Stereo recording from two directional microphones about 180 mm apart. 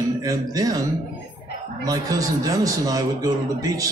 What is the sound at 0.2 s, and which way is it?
Speech, 20° right (ahead or behind).